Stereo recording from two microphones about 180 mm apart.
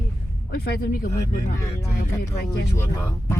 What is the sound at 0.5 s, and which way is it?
Speech, 55° left (ahead or behind).